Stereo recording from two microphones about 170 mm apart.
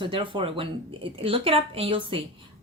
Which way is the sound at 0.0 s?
30° right (ahead or behind).